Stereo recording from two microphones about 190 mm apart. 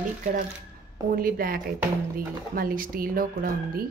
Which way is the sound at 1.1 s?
50° right (ahead or behind).